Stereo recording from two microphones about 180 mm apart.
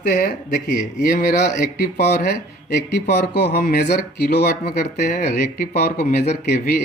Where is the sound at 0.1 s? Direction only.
60° left (ahead or behind).